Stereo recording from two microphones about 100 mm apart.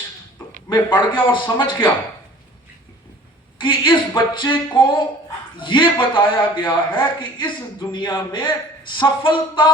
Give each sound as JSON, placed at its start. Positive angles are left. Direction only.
{"t": 0.7, "sound": "a man's voice", "side_deg": 50}
{"t": 3.6, "sound": "a man's voice", "side_deg": 55}